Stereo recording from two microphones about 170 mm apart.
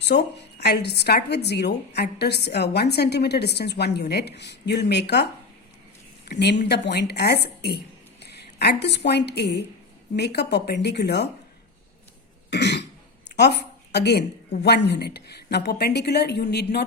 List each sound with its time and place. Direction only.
0.0 s a woman's voice: 85° left
12.5 s cough: 80° left
13.2 s a woman's voice: 75° left (ahead or behind)